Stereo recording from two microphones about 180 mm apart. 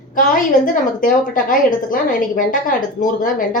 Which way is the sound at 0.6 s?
50° left (ahead or behind).